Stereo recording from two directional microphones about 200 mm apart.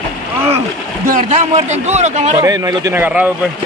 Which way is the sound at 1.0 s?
40° right (ahead or behind).